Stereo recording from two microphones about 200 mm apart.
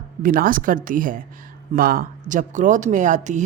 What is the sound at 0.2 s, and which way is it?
Speech, 45° right (ahead or behind).